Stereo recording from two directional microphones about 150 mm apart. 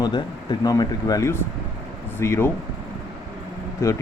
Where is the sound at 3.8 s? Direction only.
20° left (ahead or behind).